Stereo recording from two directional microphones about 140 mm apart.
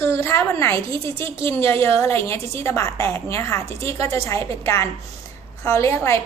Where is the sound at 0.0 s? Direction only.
15° left (ahead or behind).